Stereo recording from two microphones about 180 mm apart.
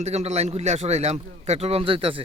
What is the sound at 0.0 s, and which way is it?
Speech, 35° right (ahead or behind).